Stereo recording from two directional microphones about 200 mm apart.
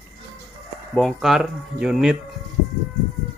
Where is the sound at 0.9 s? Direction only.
Centre (ahead or behind).